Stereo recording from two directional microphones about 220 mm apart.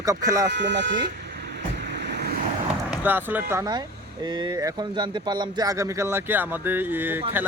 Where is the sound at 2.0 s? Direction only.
50° right (ahead or behind).